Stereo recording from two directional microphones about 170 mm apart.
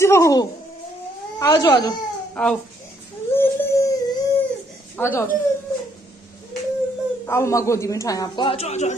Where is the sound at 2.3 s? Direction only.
5° left (ahead or behind).